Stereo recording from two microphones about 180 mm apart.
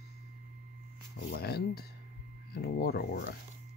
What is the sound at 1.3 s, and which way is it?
Speech, 60° left (ahead or behind).